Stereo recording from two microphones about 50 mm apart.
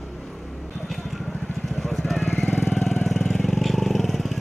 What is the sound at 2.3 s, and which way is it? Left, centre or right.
Jackhammer, left.